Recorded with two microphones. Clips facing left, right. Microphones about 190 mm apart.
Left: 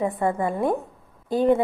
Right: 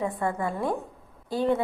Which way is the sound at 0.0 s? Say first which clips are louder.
Left 5 dB; 20° left (ahead or behind).